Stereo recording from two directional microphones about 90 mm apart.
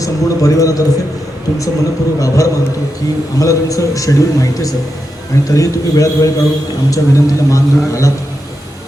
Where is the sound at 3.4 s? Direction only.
40° left (ahead or behind).